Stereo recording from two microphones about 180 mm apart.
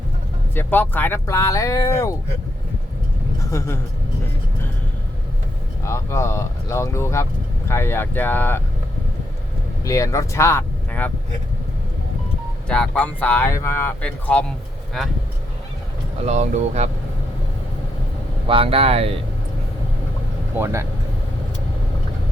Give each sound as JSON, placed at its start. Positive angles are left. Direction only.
{"t": 0.5, "sound": "speech", "side_deg": 10}
{"t": 3.5, "sound": "speech", "side_deg": 15}
{"t": 5.8, "sound": "speech", "side_deg": 15}
{"t": 9.8, "sound": "speech", "side_deg": 20}
{"t": 12.6, "sound": "speech", "side_deg": 5}
{"t": 16.2, "sound": "speech", "side_deg": -40}
{"t": 18.4, "sound": "speech", "side_deg": -30}
{"t": 20.5, "sound": "speech", "side_deg": -10}